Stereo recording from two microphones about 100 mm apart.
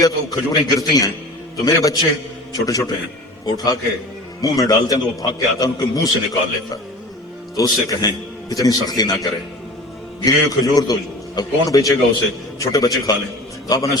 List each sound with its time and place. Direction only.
0.0 s a man's voice: 35° left (ahead or behind)
7.5 s a man's voice: 40° left (ahead or behind)